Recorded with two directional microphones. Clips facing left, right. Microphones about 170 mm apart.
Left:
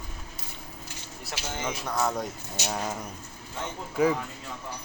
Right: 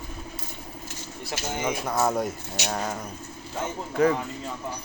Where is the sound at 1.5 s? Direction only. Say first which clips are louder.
Right 4 dB; 15° right (ahead or behind).